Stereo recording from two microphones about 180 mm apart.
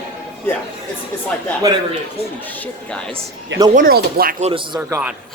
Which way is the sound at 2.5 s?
10° left (ahead or behind).